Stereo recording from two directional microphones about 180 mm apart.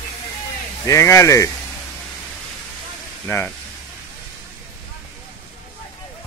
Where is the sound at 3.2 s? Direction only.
10° left (ahead or behind).